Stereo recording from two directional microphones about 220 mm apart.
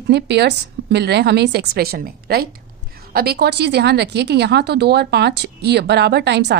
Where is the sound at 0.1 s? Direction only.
50° right (ahead or behind).